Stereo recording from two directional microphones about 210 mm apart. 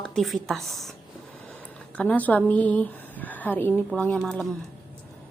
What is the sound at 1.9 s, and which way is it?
A woman's voice, 5° left (ahead or behind).